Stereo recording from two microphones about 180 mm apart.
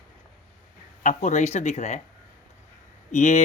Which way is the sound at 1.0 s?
40° left (ahead or behind).